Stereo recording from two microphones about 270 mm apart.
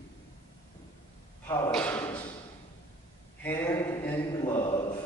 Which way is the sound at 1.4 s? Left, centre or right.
Centre.